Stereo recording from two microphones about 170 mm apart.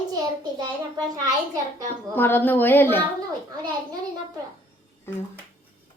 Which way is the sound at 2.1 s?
10° left (ahead or behind).